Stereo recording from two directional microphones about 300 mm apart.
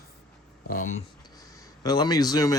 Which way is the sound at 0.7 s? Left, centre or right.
Left.